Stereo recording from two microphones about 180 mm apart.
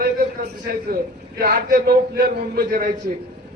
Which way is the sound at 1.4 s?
60° right (ahead or behind).